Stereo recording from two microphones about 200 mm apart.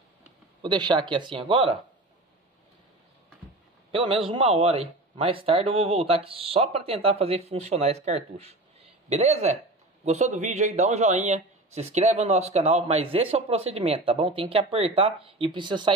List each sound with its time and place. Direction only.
0.6 s speech: 20° right (ahead or behind)
3.9 s a man's voice: 30° right (ahead or behind)